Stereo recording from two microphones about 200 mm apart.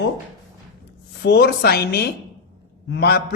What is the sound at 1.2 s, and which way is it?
A man's voice, 55° left (ahead or behind).